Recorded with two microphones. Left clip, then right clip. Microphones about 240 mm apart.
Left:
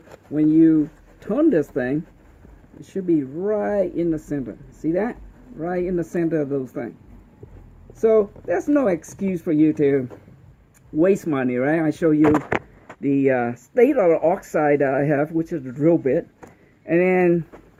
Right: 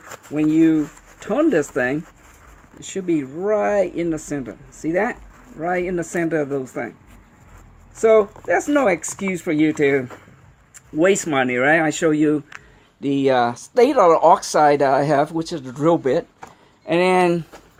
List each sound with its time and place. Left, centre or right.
0.3 s speech: right
8.0 s speech: centre
13.0 s speech: right
16.8 s speech: right